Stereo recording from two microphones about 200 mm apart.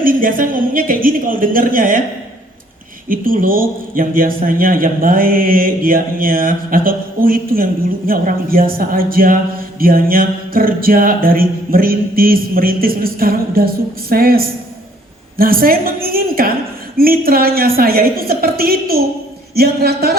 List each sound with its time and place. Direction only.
0.1 s a man's voice: 45° right (ahead or behind)
3.1 s a man's voice: 45° right (ahead or behind)